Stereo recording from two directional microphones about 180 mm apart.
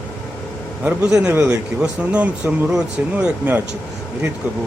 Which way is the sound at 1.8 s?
5° right (ahead or behind).